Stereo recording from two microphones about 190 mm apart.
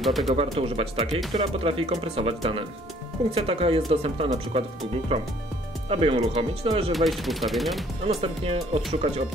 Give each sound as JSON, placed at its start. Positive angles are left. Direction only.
{"t": 0.0, "sound": "speech", "side_deg": 0}
{"t": 0.3, "sound": "speech", "side_deg": -30}
{"t": 6.9, "sound": "speech", "side_deg": 0}
{"t": 8.1, "sound": "speech", "side_deg": -30}